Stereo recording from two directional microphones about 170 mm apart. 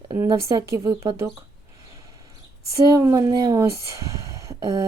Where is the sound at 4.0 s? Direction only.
20° right (ahead or behind).